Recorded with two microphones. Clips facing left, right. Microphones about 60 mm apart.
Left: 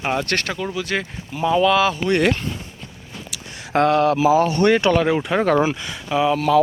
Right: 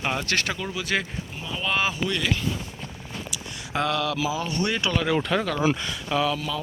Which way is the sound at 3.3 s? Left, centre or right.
Left.